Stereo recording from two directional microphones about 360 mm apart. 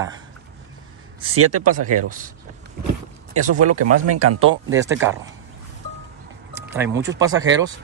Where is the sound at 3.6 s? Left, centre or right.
Right.